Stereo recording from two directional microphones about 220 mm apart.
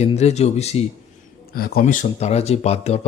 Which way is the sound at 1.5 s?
40° left (ahead or behind).